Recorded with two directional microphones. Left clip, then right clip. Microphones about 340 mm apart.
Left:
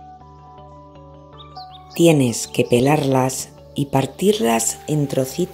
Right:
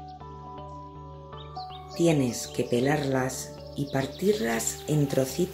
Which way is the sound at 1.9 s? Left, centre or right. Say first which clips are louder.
Left 10 dB; centre.